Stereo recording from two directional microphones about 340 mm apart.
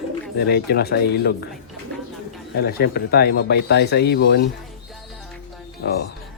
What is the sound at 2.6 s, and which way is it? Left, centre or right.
Speech, left.